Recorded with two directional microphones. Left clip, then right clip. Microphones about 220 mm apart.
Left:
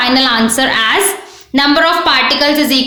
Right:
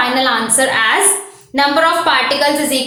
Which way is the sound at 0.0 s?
45° left (ahead or behind).